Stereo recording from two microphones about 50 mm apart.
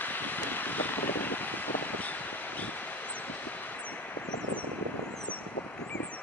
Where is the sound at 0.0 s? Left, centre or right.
Left.